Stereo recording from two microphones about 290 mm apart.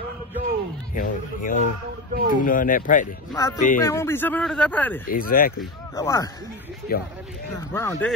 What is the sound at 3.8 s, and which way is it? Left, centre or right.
Speech, centre.